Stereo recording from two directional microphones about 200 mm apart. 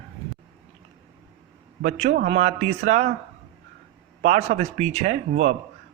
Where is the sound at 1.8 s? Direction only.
35° right (ahead or behind).